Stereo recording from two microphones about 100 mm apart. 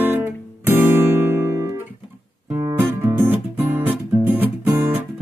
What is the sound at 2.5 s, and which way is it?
Music, 35° right (ahead or behind).